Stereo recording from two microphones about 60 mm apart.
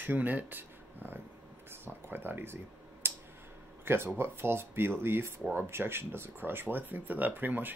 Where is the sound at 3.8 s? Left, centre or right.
Right.